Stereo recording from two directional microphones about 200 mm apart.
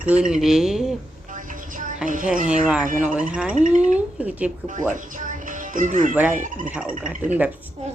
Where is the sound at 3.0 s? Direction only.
5° right (ahead or behind).